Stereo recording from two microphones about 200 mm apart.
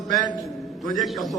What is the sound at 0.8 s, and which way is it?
Speech, centre (ahead or behind).